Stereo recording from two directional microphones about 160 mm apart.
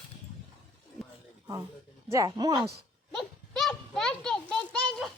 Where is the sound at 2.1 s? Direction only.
20° right (ahead or behind).